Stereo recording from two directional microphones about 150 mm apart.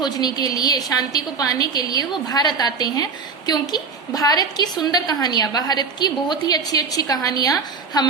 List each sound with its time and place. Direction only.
0.0 s a woman's voice: 25° left (ahead or behind)